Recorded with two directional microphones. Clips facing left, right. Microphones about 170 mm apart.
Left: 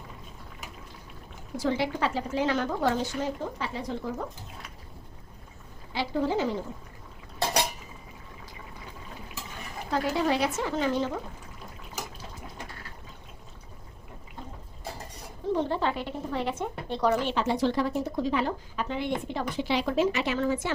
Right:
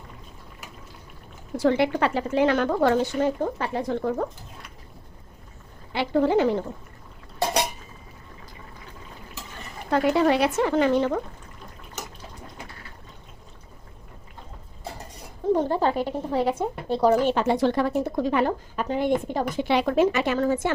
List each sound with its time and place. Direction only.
1.5 s a woman's voice: 60° right (ahead or behind)
5.9 s a woman's voice: 60° right (ahead or behind)
9.9 s a woman's voice: 65° right (ahead or behind)
15.5 s speech: 40° right (ahead or behind)